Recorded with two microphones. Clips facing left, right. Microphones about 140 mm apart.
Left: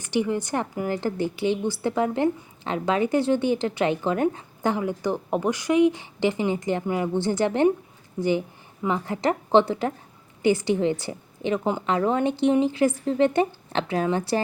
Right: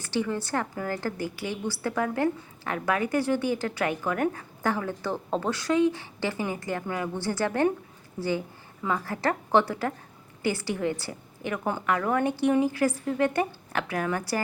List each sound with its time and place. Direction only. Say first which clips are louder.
0.0 s a woman's voice: left 4 dB; 20° left (ahead or behind)